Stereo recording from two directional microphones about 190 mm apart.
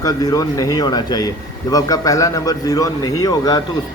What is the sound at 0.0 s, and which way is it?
Speech, 20° left (ahead or behind).